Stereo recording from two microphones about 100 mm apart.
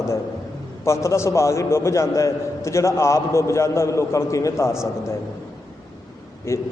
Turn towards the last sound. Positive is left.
turn(degrees=25)  # may be behind; listen again after turning